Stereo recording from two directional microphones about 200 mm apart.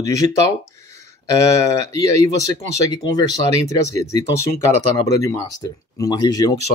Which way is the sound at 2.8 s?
20° left (ahead or behind).